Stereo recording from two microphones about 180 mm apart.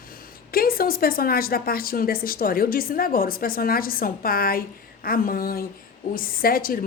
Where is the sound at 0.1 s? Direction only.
55° left (ahead or behind).